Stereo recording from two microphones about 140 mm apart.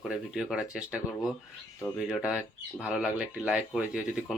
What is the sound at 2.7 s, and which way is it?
Speech, 5° right (ahead or behind).